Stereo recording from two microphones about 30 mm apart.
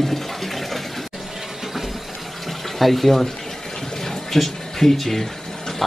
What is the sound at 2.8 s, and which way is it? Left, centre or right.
Speech, centre.